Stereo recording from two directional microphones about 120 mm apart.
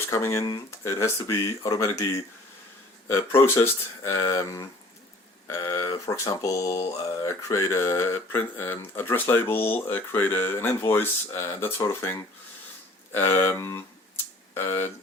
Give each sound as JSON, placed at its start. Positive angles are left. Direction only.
{"t": 0.1, "sound": "speech", "side_deg": 20}
{"t": 13.1, "sound": "speech", "side_deg": 20}